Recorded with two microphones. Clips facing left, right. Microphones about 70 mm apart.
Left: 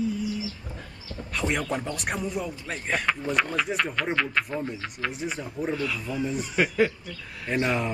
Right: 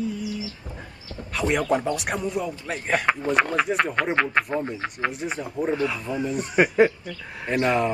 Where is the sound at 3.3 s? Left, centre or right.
Right.